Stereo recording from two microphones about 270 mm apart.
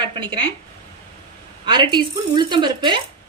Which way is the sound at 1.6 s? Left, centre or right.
Centre.